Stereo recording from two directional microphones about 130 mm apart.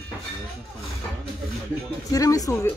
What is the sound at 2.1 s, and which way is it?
Speech, 25° left (ahead or behind).